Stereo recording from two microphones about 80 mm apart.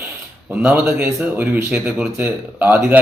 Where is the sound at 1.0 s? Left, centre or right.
Right.